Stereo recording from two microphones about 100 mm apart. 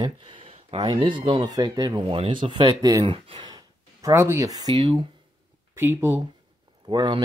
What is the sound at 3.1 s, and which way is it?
Speech, 60° right (ahead or behind).